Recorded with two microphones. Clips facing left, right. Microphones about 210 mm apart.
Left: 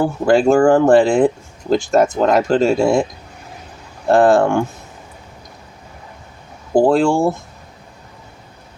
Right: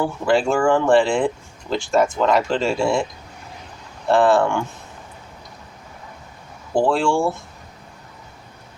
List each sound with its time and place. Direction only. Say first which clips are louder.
0.0 s speech: left 5 dB; 40° left (ahead or behind)
6.7 s speech: left 5 dB; 40° left (ahead or behind)